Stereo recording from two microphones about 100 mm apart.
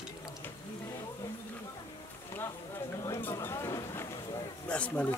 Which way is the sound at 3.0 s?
25° left (ahead or behind).